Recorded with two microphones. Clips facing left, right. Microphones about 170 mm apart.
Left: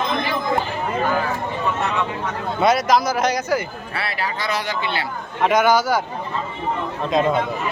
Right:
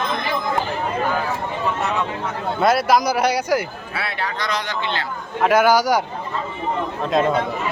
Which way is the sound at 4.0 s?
5° left (ahead or behind).